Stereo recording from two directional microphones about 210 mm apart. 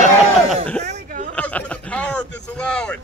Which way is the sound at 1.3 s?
5° left (ahead or behind).